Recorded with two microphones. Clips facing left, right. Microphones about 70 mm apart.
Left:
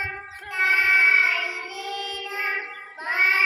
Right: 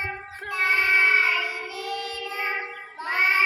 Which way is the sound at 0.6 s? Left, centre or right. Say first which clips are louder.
Left 2 dB; left.